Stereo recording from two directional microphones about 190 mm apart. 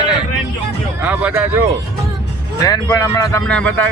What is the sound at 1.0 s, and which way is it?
Speech, 10° right (ahead or behind).